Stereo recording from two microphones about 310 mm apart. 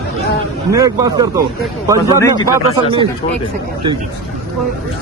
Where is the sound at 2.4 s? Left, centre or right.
Centre.